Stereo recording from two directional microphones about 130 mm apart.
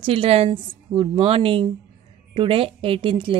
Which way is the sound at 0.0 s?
45° right (ahead or behind).